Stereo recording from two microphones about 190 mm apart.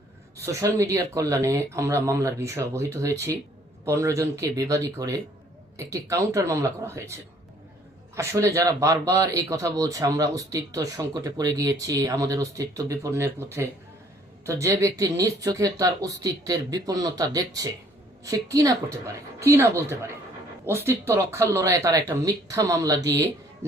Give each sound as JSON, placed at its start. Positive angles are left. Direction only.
{"t": 0.8, "sound": "speech", "side_deg": -15}
{"t": 8.1, "sound": "speech", "side_deg": -15}